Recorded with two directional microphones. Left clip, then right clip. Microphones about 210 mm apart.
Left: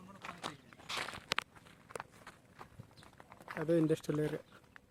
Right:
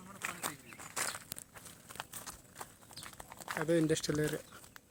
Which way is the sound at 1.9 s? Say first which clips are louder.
Left 1 dB; 40° right (ahead or behind).